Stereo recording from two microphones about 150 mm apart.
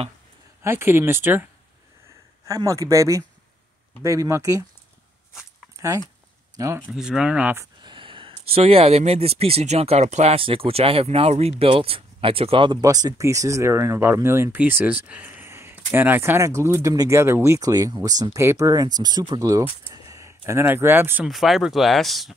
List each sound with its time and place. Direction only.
0.6 s speech: 15° right (ahead or behind)
2.4 s speech: 20° right (ahead or behind)
5.8 s speech: 20° right (ahead or behind)
6.9 s speech: 5° right (ahead or behind)
7.8 s speech: 35° right (ahead or behind)
12.8 s speech: 25° right (ahead or behind)
21.3 s speech: centre (ahead or behind)